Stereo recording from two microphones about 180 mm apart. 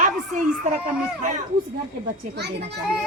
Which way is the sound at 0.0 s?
45° right (ahead or behind).